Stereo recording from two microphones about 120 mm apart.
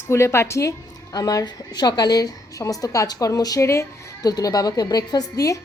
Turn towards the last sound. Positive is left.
turn(degrees=30)  # may be behind; listen again after turning